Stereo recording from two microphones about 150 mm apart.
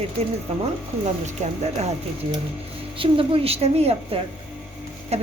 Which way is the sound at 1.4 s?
50° right (ahead or behind).